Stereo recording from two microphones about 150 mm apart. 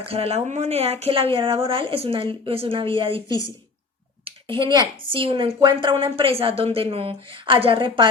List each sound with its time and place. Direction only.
0.0 s a woman's voice: 40° right (ahead or behind)
4.4 s a woman's voice: 35° right (ahead or behind)